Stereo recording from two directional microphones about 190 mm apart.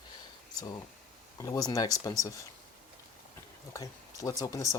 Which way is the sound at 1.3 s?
20° left (ahead or behind).